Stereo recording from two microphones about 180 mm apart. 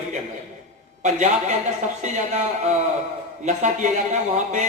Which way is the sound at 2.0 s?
40° right (ahead or behind).